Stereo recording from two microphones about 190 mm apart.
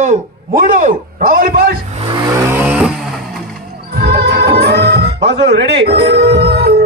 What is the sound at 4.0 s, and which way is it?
Music, 60° right (ahead or behind).